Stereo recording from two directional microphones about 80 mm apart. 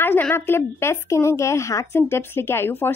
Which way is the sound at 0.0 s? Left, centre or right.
Left.